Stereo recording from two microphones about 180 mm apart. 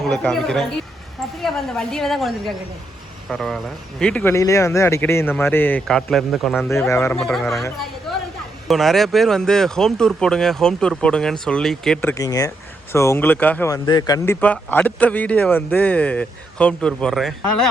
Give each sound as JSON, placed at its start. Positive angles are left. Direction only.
{"t": 0.0, "sound": "speech", "side_deg": 5}
{"t": 6.7, "sound": "speech", "side_deg": 15}
{"t": 7.2, "sound": "speech", "side_deg": 0}
{"t": 8.6, "sound": "speech", "side_deg": 0}
{"t": 12.1, "sound": "speech", "side_deg": 20}
{"t": 14.4, "sound": "speech", "side_deg": 10}